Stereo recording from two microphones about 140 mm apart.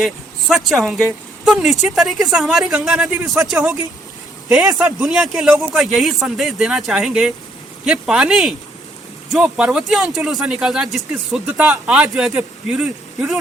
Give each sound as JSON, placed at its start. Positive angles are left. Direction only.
{"t": 0.0, "sound": "speech", "side_deg": 0}
{"t": 3.2, "sound": "speech", "side_deg": -25}
{"t": 3.5, "sound": "speech", "side_deg": -5}
{"t": 4.8, "sound": "speech", "side_deg": -15}
{"t": 5.1, "sound": "speech", "side_deg": -5}